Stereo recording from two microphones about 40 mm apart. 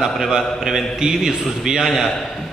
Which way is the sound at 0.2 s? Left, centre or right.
Centre.